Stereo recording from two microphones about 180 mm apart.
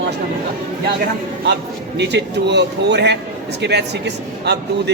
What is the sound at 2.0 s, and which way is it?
A man's voice, 70° right (ahead or behind).